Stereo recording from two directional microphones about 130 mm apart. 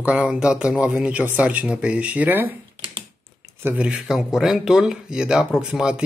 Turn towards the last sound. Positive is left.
turn(degrees=-5)  # may be behind; listen again after turning